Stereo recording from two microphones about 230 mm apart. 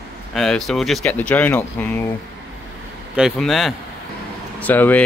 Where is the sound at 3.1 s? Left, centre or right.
Centre.